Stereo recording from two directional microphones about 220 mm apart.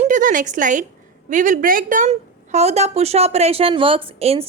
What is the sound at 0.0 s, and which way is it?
A woman's voice, 35° right (ahead or behind).